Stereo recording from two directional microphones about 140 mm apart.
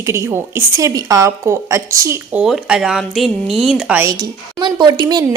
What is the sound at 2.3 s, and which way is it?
Speech, 5° right (ahead or behind).